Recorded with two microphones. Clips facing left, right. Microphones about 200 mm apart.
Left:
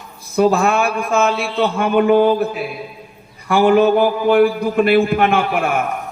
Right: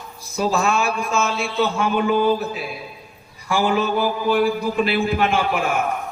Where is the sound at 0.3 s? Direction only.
55° left (ahead or behind).